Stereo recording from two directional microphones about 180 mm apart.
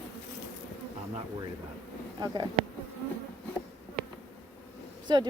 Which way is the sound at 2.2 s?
25° right (ahead or behind).